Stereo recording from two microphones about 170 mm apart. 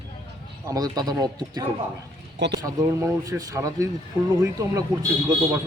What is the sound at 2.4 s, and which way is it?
Speech, 90° right.